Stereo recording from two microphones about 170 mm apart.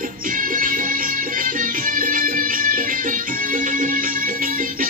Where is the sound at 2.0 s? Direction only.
55° right (ahead or behind).